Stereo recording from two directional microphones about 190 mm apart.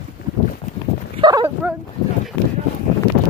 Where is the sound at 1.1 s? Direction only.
25° right (ahead or behind).